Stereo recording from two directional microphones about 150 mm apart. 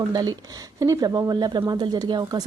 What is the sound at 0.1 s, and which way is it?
Speech, 25° right (ahead or behind).